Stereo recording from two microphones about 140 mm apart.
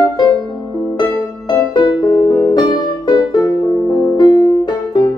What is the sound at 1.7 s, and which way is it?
Music, 30° left (ahead or behind).